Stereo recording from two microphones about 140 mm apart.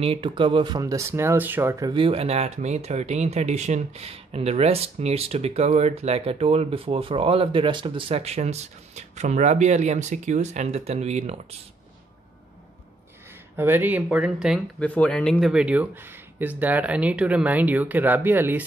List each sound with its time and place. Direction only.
0.0 s speech: 40° right (ahead or behind); by 1.9 s 20° right (ahead or behind)
1.9 s speech: 40° right (ahead or behind)
13.6 s speech: 15° right (ahead or behind)
14.8 s speech: 10° left (ahead or behind)
15.5 s speech: 10° right (ahead or behind)